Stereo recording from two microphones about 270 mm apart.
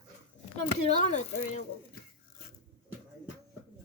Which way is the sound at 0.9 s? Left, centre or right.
Left.